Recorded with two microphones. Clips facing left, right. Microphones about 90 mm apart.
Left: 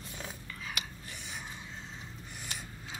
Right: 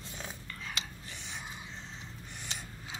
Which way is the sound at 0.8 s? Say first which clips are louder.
Even; 25° right (ahead or behind).